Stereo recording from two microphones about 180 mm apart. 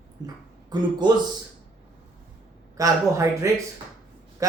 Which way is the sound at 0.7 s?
25° right (ahead or behind).